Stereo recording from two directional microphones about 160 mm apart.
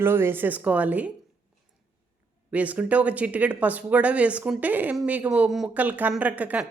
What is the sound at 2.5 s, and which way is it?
Speech, 10° right (ahead or behind).